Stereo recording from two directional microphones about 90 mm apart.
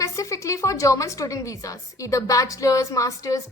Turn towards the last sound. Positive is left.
turn(degrees=40)  # may be behind; listen again after turning